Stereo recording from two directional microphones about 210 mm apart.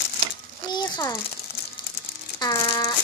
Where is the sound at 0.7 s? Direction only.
20° left (ahead or behind).